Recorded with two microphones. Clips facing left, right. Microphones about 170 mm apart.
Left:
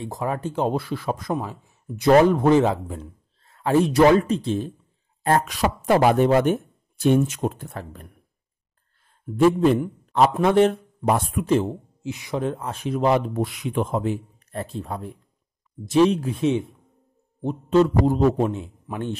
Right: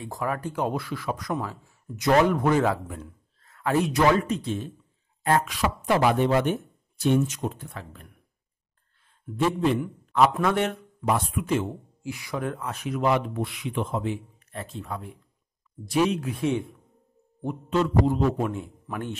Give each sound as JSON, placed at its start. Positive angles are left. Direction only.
{"t": 0.0, "sound": "a man's voice", "side_deg": 25}
{"t": 2.0, "sound": "a man's voice", "side_deg": 30}
{"t": 9.4, "sound": "speech", "side_deg": 45}
{"t": 10.1, "sound": "a man's voice", "side_deg": 30}
{"t": 12.1, "sound": "a man's voice", "side_deg": 20}
{"t": 17.6, "sound": "speech", "side_deg": 35}
{"t": 18.5, "sound": "a man's voice", "side_deg": 20}